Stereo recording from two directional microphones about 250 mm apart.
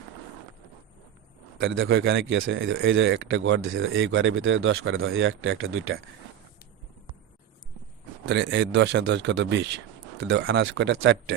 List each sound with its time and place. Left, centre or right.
1.5 s speech: right
8.2 s speech: right